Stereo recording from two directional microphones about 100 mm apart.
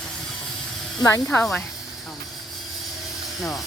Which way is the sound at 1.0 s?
35° left (ahead or behind).